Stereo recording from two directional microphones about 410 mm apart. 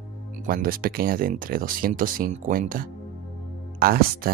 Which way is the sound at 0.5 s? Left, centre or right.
Right.